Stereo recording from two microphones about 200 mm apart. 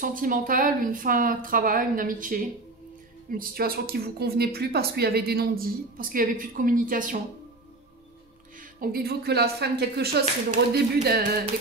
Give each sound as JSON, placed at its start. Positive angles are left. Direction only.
{"t": 0.0, "sound": "speech", "side_deg": -45}
{"t": 8.5, "sound": "speech", "side_deg": -45}